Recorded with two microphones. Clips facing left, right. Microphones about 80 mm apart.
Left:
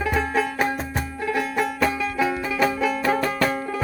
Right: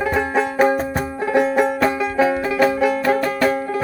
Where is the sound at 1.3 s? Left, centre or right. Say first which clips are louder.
Right 8 dB; right; by 3.5 s centre.